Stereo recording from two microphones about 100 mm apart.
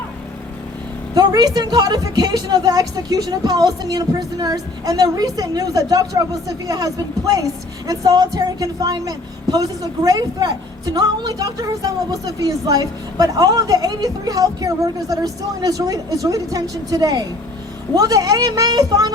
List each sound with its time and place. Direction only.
1.1 s a woman's voice: 40° right (ahead or behind)